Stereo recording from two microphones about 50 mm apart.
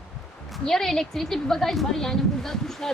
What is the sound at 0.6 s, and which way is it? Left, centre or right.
A woman's voice, centre.